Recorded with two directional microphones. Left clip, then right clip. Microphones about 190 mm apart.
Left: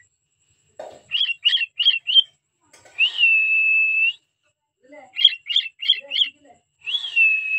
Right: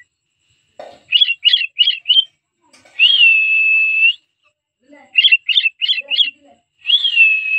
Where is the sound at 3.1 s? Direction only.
5° right (ahead or behind).